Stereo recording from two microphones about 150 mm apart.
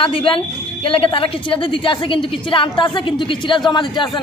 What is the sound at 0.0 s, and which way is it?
A woman's voice, 35° left (ahead or behind).